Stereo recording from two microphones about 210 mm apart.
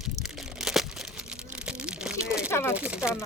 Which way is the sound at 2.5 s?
10° left (ahead or behind).